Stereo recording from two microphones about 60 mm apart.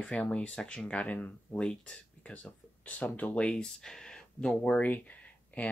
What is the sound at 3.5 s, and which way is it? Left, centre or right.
Speech, centre.